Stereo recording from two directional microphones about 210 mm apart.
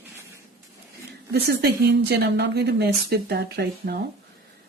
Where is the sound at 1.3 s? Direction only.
50° right (ahead or behind).